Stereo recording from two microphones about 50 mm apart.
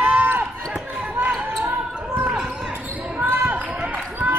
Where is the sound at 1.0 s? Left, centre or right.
Right.